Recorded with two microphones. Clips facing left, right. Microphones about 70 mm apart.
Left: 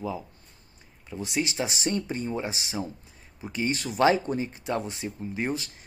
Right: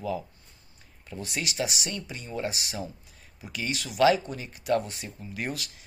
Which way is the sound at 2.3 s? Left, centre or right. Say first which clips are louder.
Left 1 dB; left.